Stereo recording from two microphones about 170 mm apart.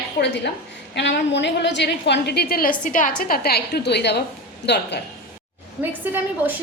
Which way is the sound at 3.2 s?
65° left (ahead or behind).